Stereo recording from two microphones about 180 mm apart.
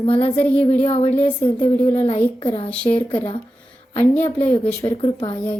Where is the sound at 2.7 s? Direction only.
5° left (ahead or behind).